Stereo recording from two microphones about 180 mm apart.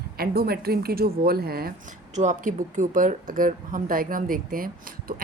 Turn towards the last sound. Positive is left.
turn(degrees=-50)  # may be behind; listen again after turning